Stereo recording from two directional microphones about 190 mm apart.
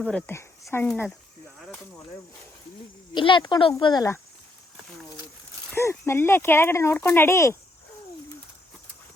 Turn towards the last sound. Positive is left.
turn(degrees=15)  # may be behind; listen again after turning